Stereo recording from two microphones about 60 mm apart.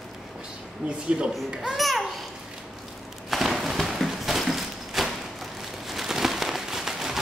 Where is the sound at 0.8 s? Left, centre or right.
Centre.